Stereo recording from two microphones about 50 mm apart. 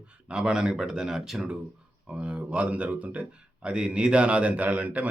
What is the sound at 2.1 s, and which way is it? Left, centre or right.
Speech, right.